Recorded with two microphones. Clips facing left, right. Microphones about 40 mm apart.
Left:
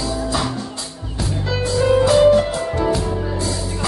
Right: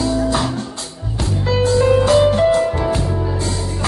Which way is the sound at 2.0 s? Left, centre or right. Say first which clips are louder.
Even; right.